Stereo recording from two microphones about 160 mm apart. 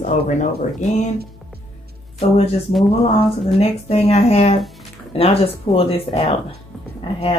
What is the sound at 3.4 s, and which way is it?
Speech, 40° left (ahead or behind).